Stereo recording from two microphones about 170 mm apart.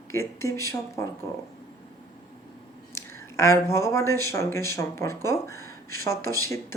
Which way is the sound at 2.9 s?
15° left (ahead or behind).